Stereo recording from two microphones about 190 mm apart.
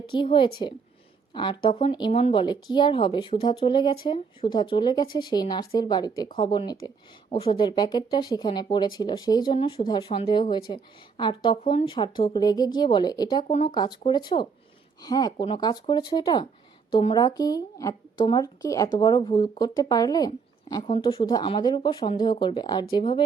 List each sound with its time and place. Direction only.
0.1 s speech: 25° left (ahead or behind)
13.5 s speech: 35° left (ahead or behind)
13.7 s speech: 20° left (ahead or behind)